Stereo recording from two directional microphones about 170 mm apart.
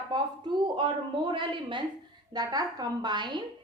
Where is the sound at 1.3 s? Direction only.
30° right (ahead or behind).